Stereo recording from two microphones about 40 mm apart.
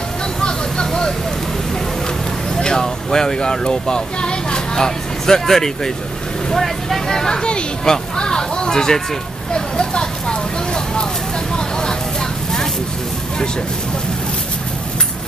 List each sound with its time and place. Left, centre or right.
0.4 s vehicle: left
2.5 s speech: centre
9.5 s vehicle: left